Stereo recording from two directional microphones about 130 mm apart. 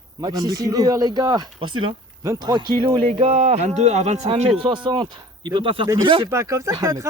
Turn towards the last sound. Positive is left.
turn(degrees=-25)  # may be behind; listen again after turning